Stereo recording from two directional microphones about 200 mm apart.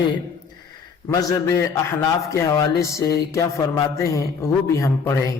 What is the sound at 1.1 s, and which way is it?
A man's voice, 15° left (ahead or behind).